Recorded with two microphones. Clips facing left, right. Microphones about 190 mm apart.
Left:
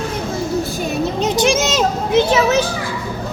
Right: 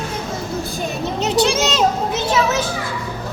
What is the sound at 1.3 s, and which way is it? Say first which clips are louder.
Speech: even; 65° right (ahead or behind).